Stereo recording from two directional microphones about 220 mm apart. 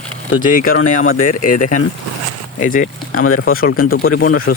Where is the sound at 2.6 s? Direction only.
35° left (ahead or behind).